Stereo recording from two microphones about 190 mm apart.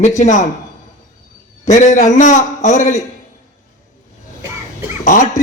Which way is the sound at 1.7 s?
40° left (ahead or behind).